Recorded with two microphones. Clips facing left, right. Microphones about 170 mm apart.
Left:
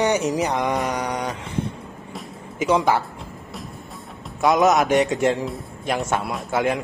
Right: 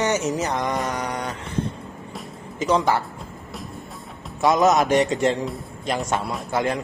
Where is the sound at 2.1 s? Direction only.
10° left (ahead or behind).